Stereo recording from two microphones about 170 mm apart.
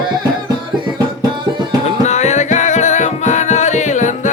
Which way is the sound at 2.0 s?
45° left (ahead or behind).